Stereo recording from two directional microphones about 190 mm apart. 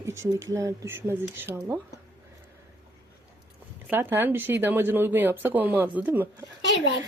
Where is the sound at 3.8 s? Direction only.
10° right (ahead or behind).